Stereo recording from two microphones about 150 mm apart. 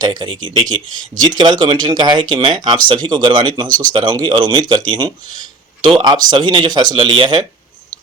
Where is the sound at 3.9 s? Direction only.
30° right (ahead or behind).